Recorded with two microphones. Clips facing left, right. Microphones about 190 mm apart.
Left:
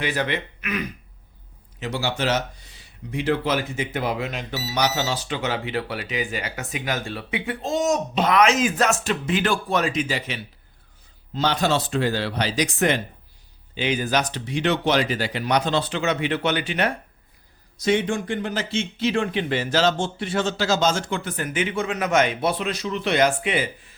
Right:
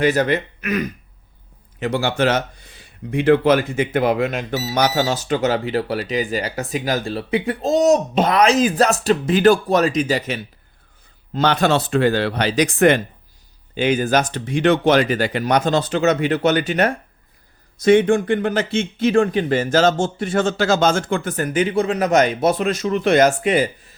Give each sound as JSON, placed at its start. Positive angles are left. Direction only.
{"t": 0.0, "sound": "speech", "side_deg": -45}
{"t": 1.8, "sound": "speech", "side_deg": -55}
{"t": 11.3, "sound": "speech", "side_deg": -60}
{"t": 17.7, "sound": "speech", "side_deg": -55}